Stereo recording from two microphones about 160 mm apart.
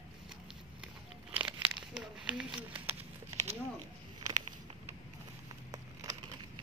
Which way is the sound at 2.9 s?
45° right (ahead or behind).